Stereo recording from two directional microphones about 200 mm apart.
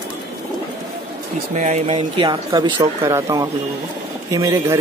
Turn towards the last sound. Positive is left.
turn(degrees=-15)  # may be behind; listen again after turning